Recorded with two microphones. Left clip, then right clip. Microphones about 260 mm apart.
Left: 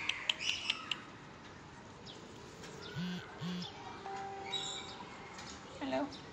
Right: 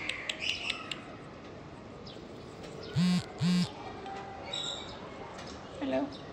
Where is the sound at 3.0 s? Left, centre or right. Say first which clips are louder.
Right 13 dB; right.